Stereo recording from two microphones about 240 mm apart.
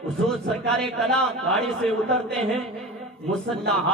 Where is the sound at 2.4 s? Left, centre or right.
Right.